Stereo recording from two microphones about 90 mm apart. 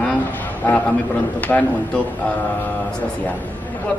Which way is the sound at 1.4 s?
15° left (ahead or behind).